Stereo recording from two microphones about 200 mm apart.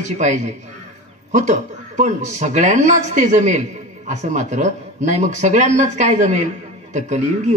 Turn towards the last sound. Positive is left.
turn(degrees=-35)  # may be behind; listen again after turning